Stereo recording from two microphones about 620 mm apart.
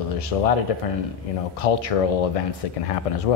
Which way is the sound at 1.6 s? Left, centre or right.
Left.